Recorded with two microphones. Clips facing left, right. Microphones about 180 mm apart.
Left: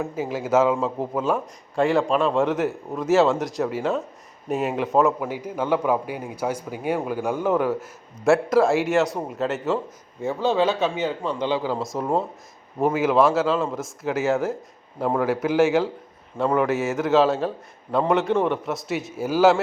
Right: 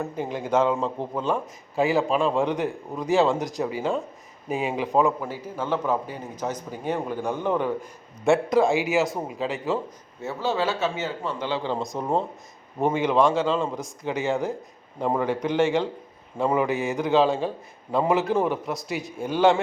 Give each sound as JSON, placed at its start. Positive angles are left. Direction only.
{"t": 0.0, "sound": "a man's voice", "side_deg": 5}
{"t": 5.3, "sound": "a man's voice", "side_deg": 15}
{"t": 10.2, "sound": "a man's voice", "side_deg": 15}
{"t": 11.6, "sound": "a man's voice", "side_deg": 5}